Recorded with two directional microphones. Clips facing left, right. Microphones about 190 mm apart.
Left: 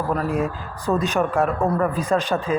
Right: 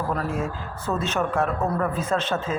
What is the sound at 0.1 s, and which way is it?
Speech, 15° left (ahead or behind).